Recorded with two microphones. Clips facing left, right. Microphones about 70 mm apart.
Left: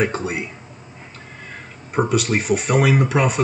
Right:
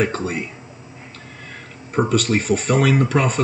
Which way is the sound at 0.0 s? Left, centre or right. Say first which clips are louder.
Even; centre.